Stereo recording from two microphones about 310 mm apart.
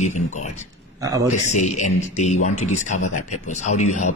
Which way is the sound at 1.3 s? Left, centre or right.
Left.